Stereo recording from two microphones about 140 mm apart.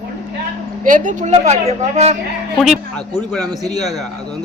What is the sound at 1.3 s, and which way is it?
Speech, 50° right (ahead or behind).